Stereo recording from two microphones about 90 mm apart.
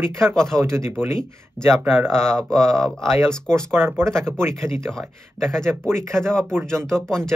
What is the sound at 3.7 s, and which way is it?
Speech, 30° right (ahead or behind).